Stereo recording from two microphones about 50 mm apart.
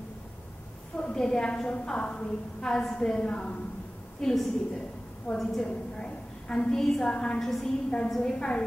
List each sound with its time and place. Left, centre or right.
1.1 s a woman's voice: centre